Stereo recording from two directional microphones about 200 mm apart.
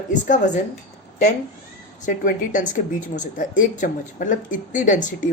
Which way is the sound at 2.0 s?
40° left (ahead or behind).